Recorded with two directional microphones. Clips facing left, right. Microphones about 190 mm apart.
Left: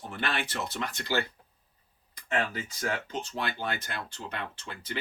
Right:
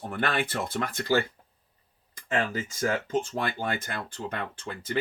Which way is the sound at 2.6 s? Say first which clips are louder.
Right 5 dB; 50° right (ahead or behind).